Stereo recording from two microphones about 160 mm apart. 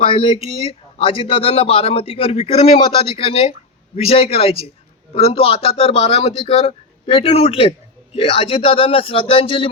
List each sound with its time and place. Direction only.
0.0 s a man's voice: 35° left (ahead or behind)